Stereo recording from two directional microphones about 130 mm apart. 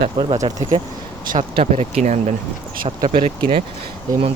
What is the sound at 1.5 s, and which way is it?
Speech, 55° right (ahead or behind).